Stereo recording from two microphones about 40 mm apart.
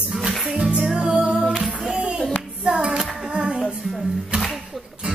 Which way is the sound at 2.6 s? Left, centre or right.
Right.